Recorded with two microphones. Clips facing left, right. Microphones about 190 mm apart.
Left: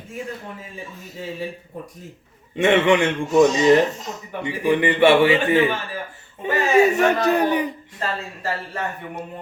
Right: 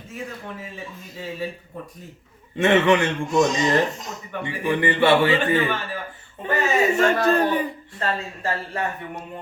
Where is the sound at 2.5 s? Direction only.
15° left (ahead or behind).